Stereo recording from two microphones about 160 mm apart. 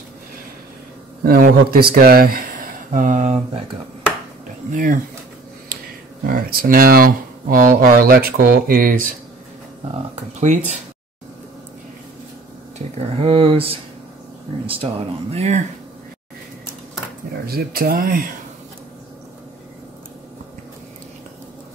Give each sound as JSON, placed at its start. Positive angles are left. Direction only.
{"t": 1.2, "sound": "speech", "side_deg": -65}
{"t": 4.7, "sound": "speech", "side_deg": -55}
{"t": 6.2, "sound": "speech", "side_deg": -65}
{"t": 10.1, "sound": "speech", "side_deg": -45}
{"t": 12.7, "sound": "speech", "side_deg": -40}
{"t": 15.3, "sound": "speech", "side_deg": -45}
{"t": 17.5, "sound": "speech", "side_deg": -70}